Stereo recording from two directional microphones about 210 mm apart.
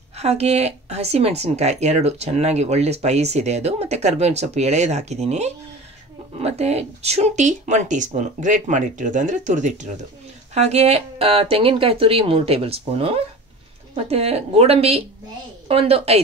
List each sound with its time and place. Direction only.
0.2 s speech: 30° right (ahead or behind)